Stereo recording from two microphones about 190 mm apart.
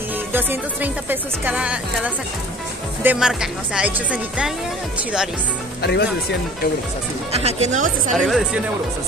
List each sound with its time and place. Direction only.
0.3 s speech: 10° right (ahead or behind)
5.8 s speech: 60° left (ahead or behind)
7.3 s speech: 35° right (ahead or behind)
8.1 s speech: centre (ahead or behind)